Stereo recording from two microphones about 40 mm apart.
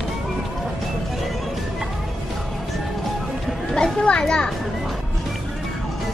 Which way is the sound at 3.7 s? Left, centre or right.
Left.